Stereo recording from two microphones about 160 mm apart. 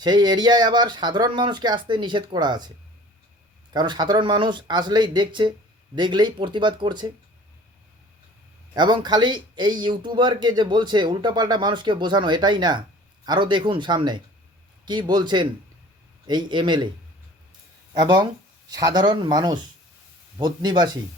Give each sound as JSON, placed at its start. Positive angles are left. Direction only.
{"t": 0.0, "sound": "speech", "side_deg": -25}
{"t": 8.7, "sound": "speech", "side_deg": -25}
{"t": 17.9, "sound": "speech", "side_deg": -25}